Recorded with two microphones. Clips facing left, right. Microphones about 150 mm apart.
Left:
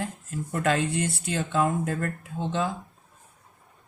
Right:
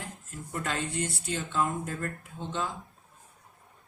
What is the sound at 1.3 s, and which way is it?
Speech, 85° left.